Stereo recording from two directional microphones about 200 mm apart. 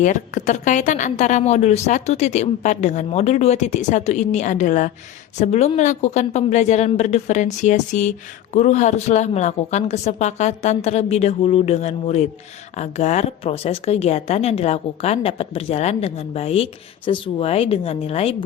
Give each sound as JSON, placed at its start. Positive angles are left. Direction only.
{"t": 0.0, "sound": "a woman's voice", "side_deg": 35}